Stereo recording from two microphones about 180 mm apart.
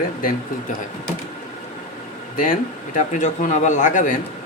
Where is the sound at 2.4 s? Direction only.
45° left (ahead or behind).